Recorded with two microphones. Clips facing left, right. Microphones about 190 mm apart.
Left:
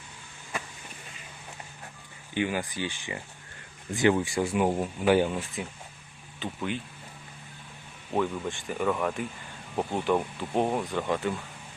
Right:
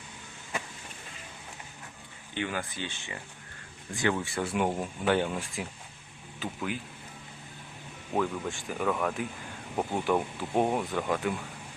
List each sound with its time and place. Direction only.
2.3 s speech: 10° left (ahead or behind)
8.1 s speech: centre (ahead or behind)